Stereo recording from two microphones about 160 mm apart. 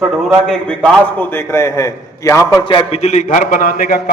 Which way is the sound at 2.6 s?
30° left (ahead or behind).